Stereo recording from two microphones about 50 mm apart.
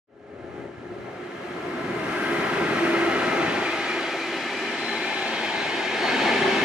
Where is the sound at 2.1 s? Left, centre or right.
Centre.